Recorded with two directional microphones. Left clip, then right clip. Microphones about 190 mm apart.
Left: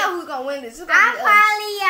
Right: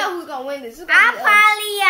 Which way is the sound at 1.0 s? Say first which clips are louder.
Right 1 dB; 40° right (ahead or behind).